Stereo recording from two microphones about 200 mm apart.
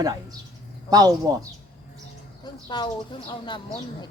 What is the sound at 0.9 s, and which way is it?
Speech, 20° right (ahead or behind).